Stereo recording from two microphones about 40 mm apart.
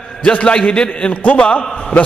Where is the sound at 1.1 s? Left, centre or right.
Left.